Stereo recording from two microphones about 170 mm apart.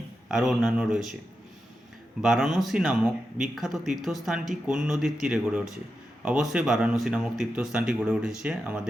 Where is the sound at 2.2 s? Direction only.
Centre (ahead or behind).